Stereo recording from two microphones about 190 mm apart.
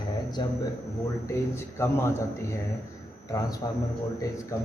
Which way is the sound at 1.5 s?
15° left (ahead or behind).